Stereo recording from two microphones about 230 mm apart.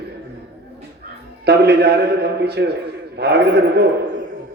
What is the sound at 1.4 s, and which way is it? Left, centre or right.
A man's voice, right.